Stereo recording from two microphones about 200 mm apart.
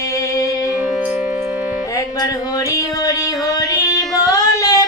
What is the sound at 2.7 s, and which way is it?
Music, 15° left (ahead or behind).